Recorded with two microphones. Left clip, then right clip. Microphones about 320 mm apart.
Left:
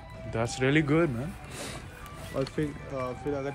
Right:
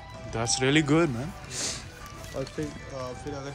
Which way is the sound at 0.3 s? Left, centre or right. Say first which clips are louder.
Right 2 dB; centre.